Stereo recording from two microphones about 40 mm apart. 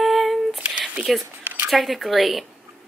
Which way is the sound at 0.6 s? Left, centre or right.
Right.